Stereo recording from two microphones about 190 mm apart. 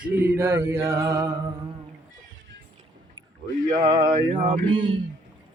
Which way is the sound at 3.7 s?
20° right (ahead or behind).